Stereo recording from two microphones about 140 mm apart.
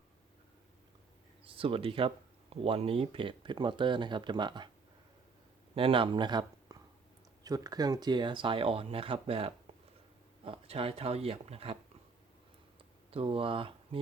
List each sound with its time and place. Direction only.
1.5 s speech: 40° right (ahead or behind)
5.7 s speech: 40° right (ahead or behind)
13.1 s speech: 40° right (ahead or behind)